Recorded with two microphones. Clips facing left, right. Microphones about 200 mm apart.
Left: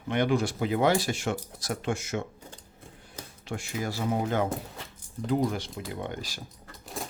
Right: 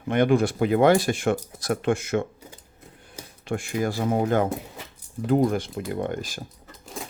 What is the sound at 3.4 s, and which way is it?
Speech, 55° right (ahead or behind).